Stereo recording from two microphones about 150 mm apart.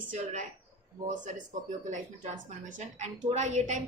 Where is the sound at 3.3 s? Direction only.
50° right (ahead or behind).